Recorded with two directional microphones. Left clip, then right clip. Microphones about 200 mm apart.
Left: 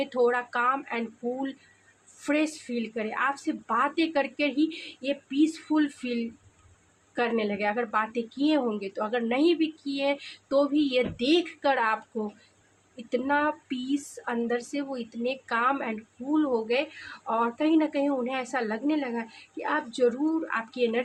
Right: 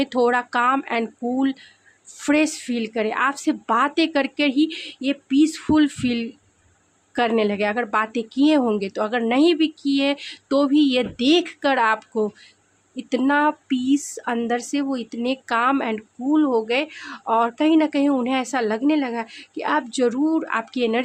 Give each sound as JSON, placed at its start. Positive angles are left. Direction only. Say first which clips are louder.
{"t": 0.0, "sound": "speech", "louder": "right 5 dB", "side_deg": -50}
{"t": 13.0, "sound": "speech", "louder": "right 6 dB", "side_deg": -50}